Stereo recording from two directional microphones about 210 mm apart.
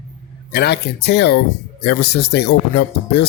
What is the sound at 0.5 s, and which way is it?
Speech, 50° left (ahead or behind).